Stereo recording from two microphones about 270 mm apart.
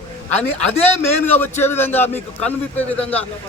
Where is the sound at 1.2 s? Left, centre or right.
Centre.